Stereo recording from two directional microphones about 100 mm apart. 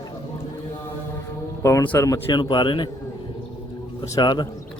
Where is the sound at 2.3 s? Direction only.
50° left (ahead or behind).